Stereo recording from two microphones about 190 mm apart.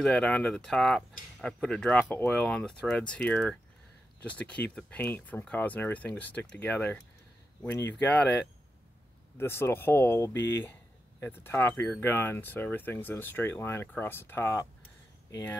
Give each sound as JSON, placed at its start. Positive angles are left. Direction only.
{"t": 0.0, "sound": "speech", "side_deg": 5}
{"t": 9.4, "sound": "speech", "side_deg": 10}
{"t": 10.3, "sound": "speech", "side_deg": 70}
{"t": 11.1, "sound": "speech", "side_deg": 10}